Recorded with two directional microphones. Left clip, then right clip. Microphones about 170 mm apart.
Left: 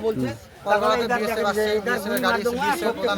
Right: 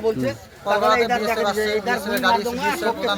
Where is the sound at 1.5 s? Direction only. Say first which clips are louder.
Right 1 dB; 40° left (ahead or behind).